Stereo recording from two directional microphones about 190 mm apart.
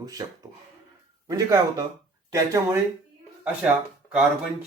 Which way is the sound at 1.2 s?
20° right (ahead or behind).